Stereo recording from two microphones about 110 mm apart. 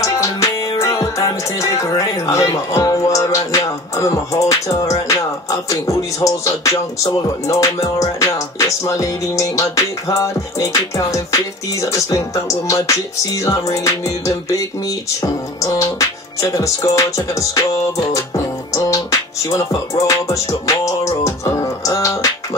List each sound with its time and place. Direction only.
0.0 s music: 30° left (ahead or behind)
15.6 s music: 30° left (ahead or behind)